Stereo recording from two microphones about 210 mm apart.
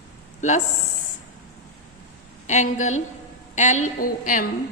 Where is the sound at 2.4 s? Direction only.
35° left (ahead or behind).